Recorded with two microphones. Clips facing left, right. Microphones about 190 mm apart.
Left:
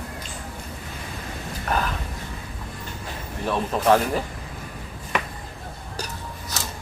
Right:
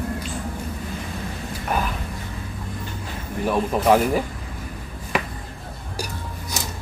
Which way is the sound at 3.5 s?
10° right (ahead or behind).